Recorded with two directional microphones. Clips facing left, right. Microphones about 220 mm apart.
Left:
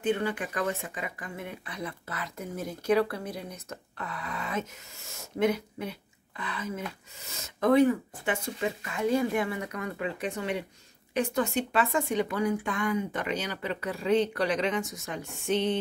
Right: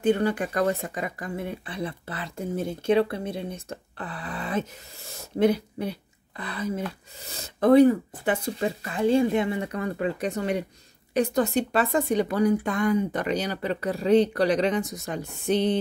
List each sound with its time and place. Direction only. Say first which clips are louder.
0.0 s speech: right 6 dB; 40° right (ahead or behind)